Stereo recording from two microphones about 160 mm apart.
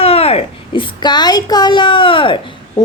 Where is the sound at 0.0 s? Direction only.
40° left (ahead or behind).